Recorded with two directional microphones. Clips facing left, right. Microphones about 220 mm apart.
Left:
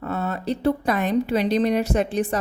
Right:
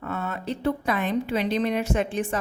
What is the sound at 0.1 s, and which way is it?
A woman's voice, 40° left (ahead or behind).